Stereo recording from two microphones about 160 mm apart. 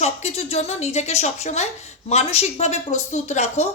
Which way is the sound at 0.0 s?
40° left (ahead or behind).